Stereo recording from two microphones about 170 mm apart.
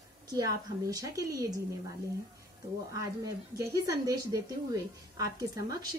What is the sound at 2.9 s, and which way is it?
A woman's voice, 20° right (ahead or behind).